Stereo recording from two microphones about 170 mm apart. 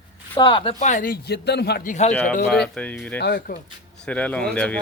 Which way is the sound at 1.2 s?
75° left (ahead or behind).